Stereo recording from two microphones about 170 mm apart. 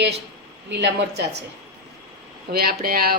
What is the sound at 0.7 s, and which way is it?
Speech, 85° right.